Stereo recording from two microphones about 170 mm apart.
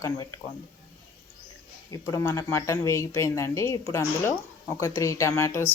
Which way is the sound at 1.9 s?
20° left (ahead or behind).